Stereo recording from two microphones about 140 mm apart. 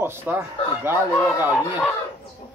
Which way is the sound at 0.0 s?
15° right (ahead or behind).